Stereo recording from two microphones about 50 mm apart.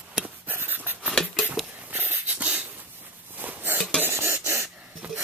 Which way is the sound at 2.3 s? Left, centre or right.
Right.